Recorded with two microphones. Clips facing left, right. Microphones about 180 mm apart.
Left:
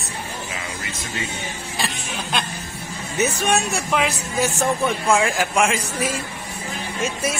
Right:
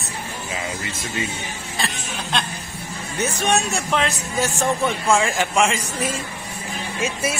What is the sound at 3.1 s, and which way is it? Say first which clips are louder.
A man's voice: left 1 dB; centre (ahead or behind).